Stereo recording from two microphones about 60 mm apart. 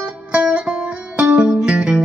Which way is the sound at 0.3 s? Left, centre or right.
Centre.